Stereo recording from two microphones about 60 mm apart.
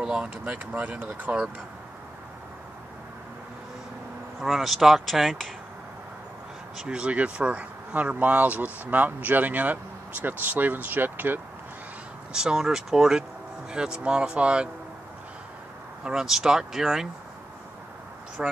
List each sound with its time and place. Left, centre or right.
0.0 s speech: centre
4.4 s speech: centre
6.8 s speech: centre; by 11.4 s right
12.3 s speech: centre
16.0 s speech: centre
18.4 s speech: centre